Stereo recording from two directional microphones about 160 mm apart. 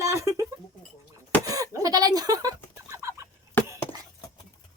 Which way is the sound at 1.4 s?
20° right (ahead or behind).